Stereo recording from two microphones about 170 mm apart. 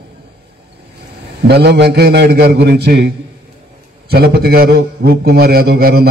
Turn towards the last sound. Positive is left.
turn(degrees=-65)  # may be behind; listen again after turning